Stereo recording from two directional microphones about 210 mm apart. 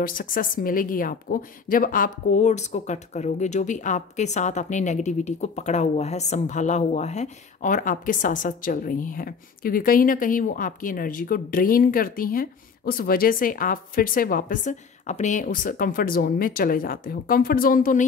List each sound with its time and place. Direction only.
0.0 s a woman's voice: 40° left (ahead or behind)